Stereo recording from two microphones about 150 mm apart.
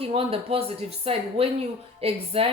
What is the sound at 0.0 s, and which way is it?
Speech, 40° right (ahead or behind).